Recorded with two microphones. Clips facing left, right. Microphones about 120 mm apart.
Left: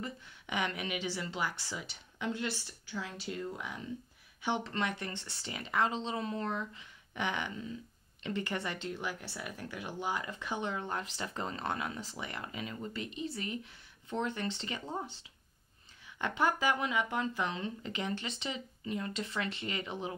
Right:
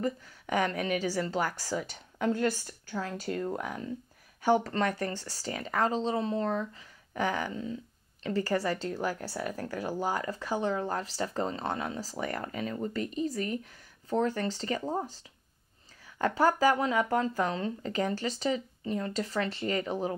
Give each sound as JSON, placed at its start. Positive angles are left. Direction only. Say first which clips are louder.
{"t": 0.0, "sound": "speech", "louder": "right 10 dB", "side_deg": -40}